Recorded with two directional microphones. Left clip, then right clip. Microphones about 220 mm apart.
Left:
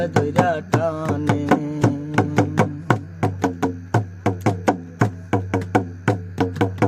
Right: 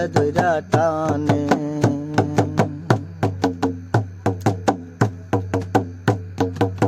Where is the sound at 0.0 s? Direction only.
45° right (ahead or behind).